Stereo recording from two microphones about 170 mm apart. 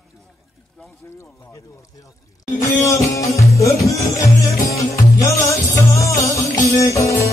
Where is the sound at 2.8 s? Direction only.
20° left (ahead or behind).